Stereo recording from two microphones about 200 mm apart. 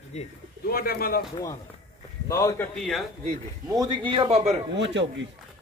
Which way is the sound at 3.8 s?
20° right (ahead or behind).